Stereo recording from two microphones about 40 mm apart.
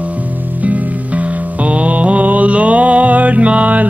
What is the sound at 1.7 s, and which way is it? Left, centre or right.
Music, right.